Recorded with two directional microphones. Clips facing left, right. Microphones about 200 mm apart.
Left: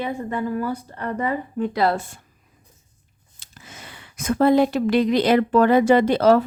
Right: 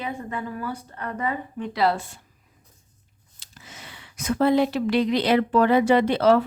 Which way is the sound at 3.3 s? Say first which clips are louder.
Left 2 dB; 50° left (ahead or behind).